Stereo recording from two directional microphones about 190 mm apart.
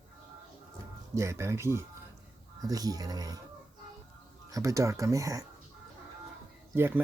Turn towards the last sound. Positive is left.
turn(degrees=-10)  # may be behind; listen again after turning